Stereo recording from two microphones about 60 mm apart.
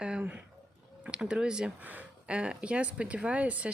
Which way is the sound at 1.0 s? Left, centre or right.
Centre.